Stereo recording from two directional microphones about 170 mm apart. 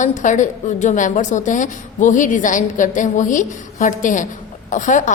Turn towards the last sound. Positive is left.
turn(degrees=45)  # may be behind; listen again after turning